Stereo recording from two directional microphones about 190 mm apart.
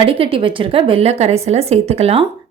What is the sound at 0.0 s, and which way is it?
Speech, 30° right (ahead or behind).